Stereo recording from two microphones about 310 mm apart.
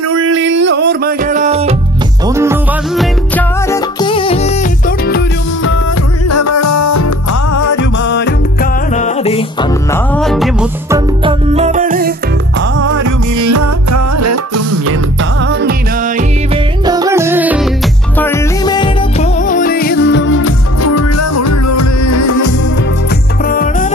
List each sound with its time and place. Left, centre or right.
0.1 s music: right
2.2 s music: centre
3.3 s music: centre; by 5.2 s left
6.2 s music: left
8.0 s music: left
8.9 s music: left
10.1 s music: centre
11.2 s music: centre
12.5 s music: right
12.9 s music: right
16.8 s music: centre
18.1 s music: centre
19.4 s music: left
23.5 s music: left